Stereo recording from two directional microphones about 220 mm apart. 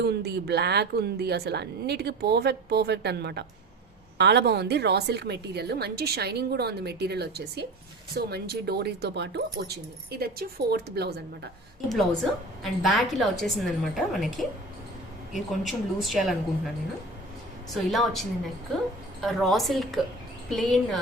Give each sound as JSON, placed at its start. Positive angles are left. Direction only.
{"t": 0.0, "sound": "a woman's voice", "side_deg": -50}
{"t": 11.9, "sound": "a woman's voice", "side_deg": 0}
{"t": 17.9, "sound": "a woman's voice", "side_deg": 0}